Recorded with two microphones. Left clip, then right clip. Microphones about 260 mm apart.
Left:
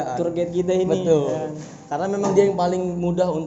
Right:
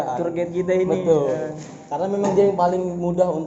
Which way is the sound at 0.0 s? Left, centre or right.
Left.